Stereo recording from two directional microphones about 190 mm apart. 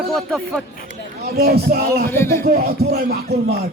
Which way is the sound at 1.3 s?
55° right (ahead or behind).